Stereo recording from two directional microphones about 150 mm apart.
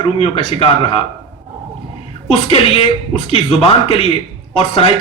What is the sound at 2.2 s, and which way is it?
A man's voice, 40° left (ahead or behind).